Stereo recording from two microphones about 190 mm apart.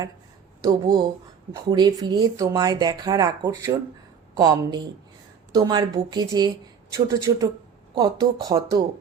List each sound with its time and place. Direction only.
0.6 s speech: 20° right (ahead or behind)